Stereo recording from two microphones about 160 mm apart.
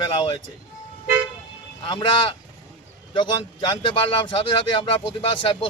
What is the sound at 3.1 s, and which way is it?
Speech, 30° left (ahead or behind).